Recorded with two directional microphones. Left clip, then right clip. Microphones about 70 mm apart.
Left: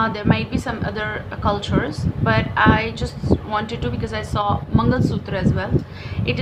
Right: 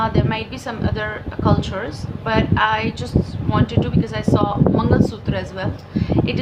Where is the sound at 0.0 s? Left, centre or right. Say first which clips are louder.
Even; left.